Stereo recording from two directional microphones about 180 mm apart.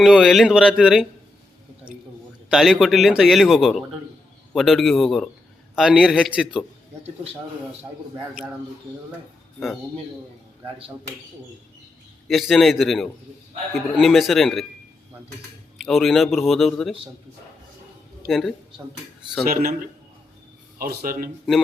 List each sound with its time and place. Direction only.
0.0 s a man's voice: centre (ahead or behind)
2.5 s a man's voice: centre (ahead or behind)
12.3 s a man's voice: centre (ahead or behind)
15.8 s a man's voice: centre (ahead or behind)
18.3 s a man's voice: centre (ahead or behind)
19.5 s a man's voice: 55° right (ahead or behind)
20.7 s speech: 55° right (ahead or behind)